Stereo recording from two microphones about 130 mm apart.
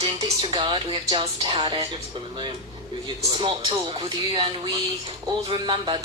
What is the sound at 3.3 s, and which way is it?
Speech, 40° right (ahead or behind).